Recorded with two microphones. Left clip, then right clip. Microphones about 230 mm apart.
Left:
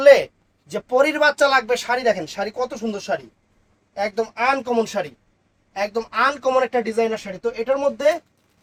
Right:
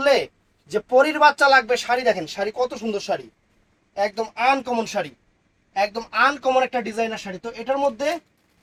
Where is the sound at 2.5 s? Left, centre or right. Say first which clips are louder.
Right 1 dB; left.